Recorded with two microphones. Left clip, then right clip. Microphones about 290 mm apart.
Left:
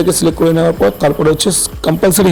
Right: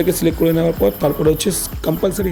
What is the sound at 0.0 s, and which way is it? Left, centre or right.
Speech, centre.